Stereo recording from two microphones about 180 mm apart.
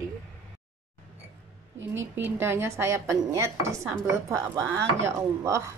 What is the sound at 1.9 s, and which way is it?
Speech, 10° right (ahead or behind).